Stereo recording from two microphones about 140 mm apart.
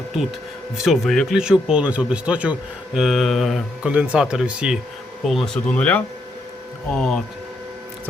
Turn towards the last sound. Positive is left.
turn(degrees=5)  # may be behind; listen again after turning